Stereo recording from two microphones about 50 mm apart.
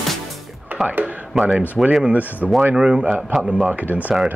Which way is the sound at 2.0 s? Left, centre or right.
Right.